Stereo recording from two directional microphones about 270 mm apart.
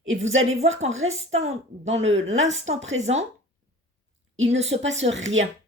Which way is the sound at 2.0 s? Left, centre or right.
Right.